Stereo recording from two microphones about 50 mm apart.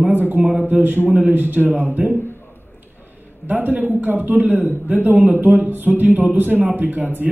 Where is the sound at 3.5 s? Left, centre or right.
Right.